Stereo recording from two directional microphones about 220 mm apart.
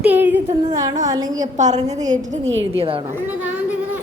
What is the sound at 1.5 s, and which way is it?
A woman's voice, 30° right (ahead or behind).